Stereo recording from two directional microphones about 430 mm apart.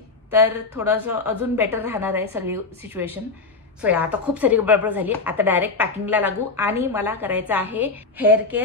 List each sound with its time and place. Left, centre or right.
0.3 s a woman's voice: centre